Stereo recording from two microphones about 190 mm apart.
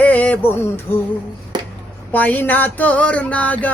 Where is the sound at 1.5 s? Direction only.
25° right (ahead or behind).